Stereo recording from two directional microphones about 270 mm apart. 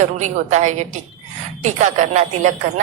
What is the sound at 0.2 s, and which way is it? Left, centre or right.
A woman's voice, right.